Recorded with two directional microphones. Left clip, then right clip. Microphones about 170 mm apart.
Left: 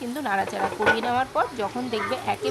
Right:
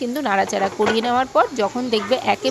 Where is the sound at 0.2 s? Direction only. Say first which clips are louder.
Right 5 dB; 30° right (ahead or behind).